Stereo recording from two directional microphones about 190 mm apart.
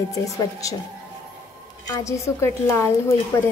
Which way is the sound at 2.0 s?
15° left (ahead or behind).